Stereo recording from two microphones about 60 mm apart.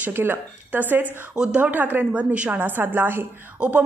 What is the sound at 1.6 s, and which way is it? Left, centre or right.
Speech, right.